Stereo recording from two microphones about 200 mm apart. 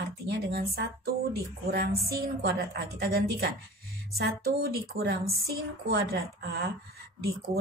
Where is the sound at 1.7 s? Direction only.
50° right (ahead or behind).